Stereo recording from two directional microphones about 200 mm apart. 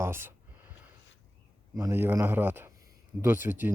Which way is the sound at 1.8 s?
10° right (ahead or behind).